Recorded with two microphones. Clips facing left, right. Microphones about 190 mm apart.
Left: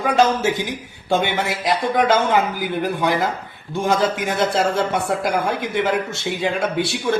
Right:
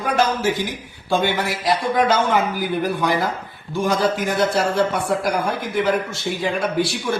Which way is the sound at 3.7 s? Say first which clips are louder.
Even; 25° left (ahead or behind).